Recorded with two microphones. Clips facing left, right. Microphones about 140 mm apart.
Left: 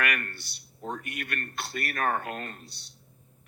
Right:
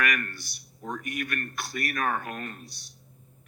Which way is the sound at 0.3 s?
60° left (ahead or behind).